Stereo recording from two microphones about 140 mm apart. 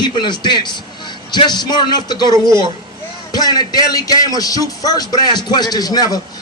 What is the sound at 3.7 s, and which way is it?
Speech, 25° left (ahead or behind).